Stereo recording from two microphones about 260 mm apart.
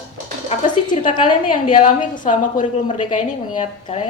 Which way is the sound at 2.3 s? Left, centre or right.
Left.